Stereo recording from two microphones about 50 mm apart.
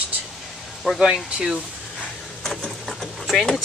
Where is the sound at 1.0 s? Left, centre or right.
Centre.